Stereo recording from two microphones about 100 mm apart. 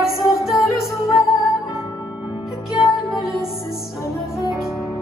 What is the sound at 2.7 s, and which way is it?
Music, centre (ahead or behind).